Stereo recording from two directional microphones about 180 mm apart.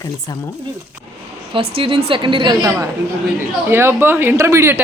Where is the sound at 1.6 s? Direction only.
30° right (ahead or behind).